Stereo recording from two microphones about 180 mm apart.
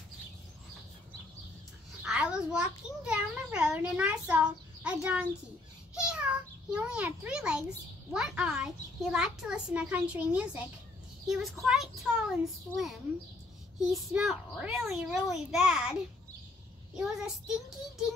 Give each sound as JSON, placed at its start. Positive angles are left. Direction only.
{"t": 2.0, "sound": "a sound", "side_deg": -5}
{"t": 8.1, "sound": "a child's voice", "side_deg": -5}
{"t": 13.7, "sound": "a child's voice", "side_deg": 0}